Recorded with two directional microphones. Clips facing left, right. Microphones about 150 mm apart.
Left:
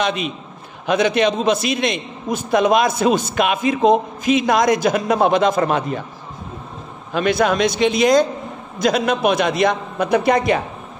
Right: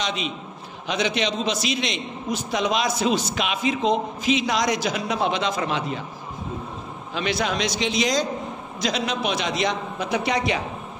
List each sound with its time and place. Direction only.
0.0 s a man's voice: 55° left (ahead or behind)
7.2 s a man's voice: 50° left (ahead or behind)